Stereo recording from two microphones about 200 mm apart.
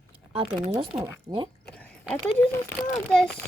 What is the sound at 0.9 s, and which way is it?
Speech, 20° right (ahead or behind).